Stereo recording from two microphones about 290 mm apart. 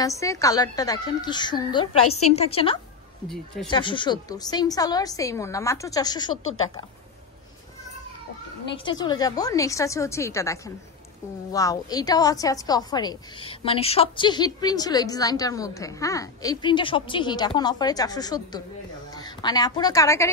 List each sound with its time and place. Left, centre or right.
0.0 s a woman's voice: centre
2.0 s a woman's voice: left
2.3 s a woman's voice: centre
3.3 s a woman's voice: centre
3.7 s a woman's voice: centre
6.3 s a woman's voice: left
8.7 s a woman's voice: centre